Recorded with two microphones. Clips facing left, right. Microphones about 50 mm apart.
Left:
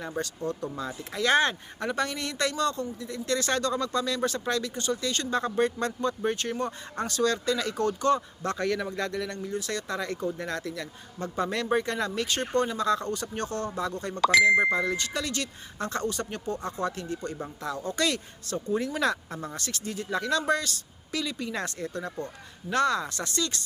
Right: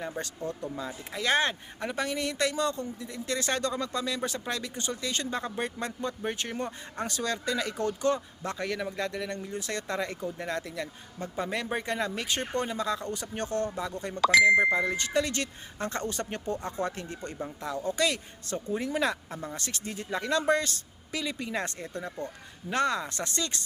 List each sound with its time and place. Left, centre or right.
0.4 s speech: right
0.8 s speech: centre; by 10.2 s right
10.3 s speech: centre
17.8 s speech: centre
19.5 s speech: right